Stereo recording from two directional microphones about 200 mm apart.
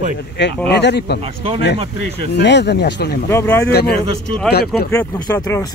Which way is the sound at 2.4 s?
60° left (ahead or behind).